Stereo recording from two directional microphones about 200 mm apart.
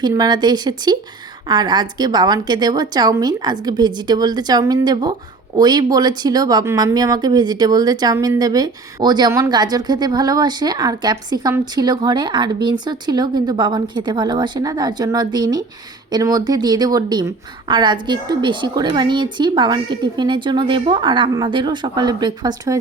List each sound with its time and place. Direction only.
0.0 s speech: 20° right (ahead or behind)